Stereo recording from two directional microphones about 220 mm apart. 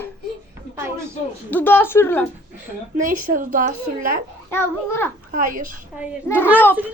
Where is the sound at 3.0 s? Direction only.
35° right (ahead or behind).